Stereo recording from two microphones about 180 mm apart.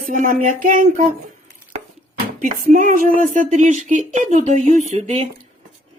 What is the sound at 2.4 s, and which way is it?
Speech, 45° right (ahead or behind).